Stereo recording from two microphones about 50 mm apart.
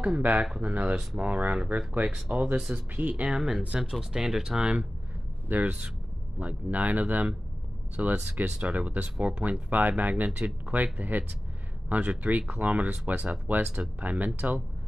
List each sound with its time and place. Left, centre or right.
0.2 s speech: right
2.3 s speech: centre
2.7 s speech: right
3.9 s speech: centre
5.5 s speech: right
8.5 s speech: right